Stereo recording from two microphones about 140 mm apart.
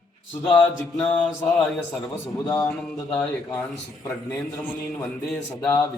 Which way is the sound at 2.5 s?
25° left (ahead or behind).